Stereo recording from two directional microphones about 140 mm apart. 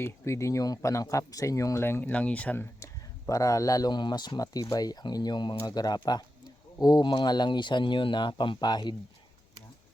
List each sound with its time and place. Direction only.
0.0 s speech: 20° left (ahead or behind)